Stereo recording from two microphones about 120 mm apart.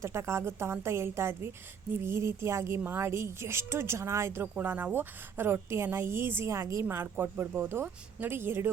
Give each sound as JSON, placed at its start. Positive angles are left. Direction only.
{"t": 0.0, "sound": "a woman's voice", "side_deg": -20}